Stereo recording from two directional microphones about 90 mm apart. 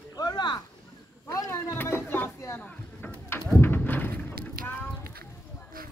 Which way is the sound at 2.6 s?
20° left (ahead or behind).